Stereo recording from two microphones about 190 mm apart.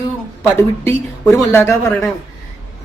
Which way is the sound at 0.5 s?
15° left (ahead or behind).